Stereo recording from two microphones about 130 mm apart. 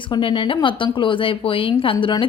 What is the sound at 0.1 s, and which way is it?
Speech, 40° left (ahead or behind).